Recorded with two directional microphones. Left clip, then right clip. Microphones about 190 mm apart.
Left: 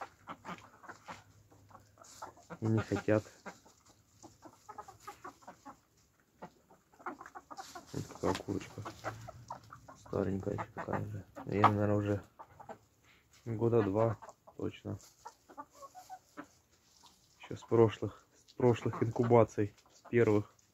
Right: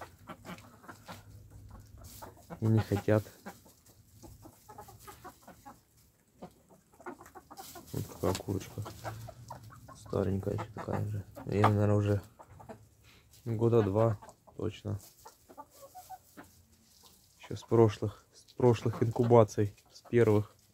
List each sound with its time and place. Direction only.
2.4 s speech: centre (ahead or behind)
7.3 s chicken: 10° left (ahead or behind)
8.2 s speech: centre (ahead or behind)
8.8 s chicken: 20° left (ahead or behind)
10.1 s speech: centre (ahead or behind)
13.5 s speech: 5° right (ahead or behind)
17.5 s speech: centre (ahead or behind)